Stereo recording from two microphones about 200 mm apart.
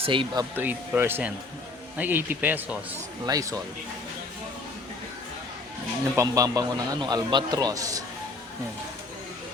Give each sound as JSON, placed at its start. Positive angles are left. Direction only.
{"t": 0.0, "sound": "speech", "side_deg": -25}
{"t": 0.5, "sound": "a man's voice", "side_deg": -10}
{"t": 6.1, "sound": "a man's voice", "side_deg": -15}